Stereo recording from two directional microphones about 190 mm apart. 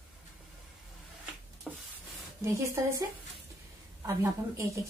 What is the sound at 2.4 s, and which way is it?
A woman's voice, 15° right (ahead or behind).